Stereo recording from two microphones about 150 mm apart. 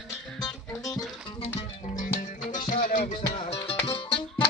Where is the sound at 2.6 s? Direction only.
60° left (ahead or behind).